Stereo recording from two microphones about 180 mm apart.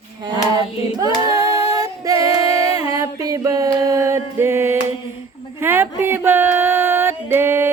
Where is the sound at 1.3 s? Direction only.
20° right (ahead or behind).